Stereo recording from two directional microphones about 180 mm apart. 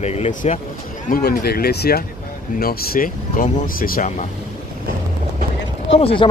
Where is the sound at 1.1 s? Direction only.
60° left (ahead or behind).